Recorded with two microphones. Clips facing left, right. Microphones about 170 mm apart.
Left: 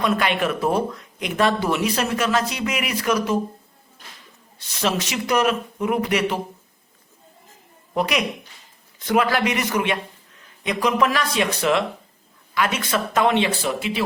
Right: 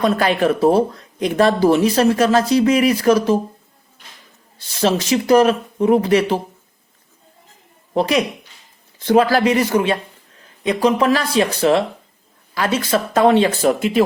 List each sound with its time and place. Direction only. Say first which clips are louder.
0.0 s speech: right 5 dB; 35° right (ahead or behind)
4.5 s speech: right 6 dB; 30° right (ahead or behind)
7.9 s a man's voice: right 5 dB; 30° right (ahead or behind)